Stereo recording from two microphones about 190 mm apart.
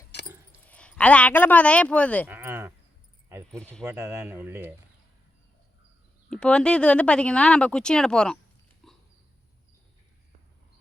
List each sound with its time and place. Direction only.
0.1 s a sound: 60° left (ahead or behind)
0.7 s speech: 5° left (ahead or behind)
2.2 s sheep: 10° right (ahead or behind)
3.2 s keys jangling: 15° right (ahead or behind)
3.8 s speech: 15° right (ahead or behind)
6.3 s speech: 5° left (ahead or behind)
8.8 s a sound: centre (ahead or behind)